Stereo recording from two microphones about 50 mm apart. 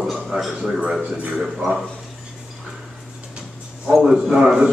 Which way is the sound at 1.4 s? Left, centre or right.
Centre.